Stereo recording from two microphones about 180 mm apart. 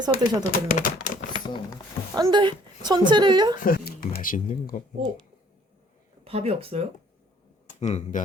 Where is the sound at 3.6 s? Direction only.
50° left (ahead or behind).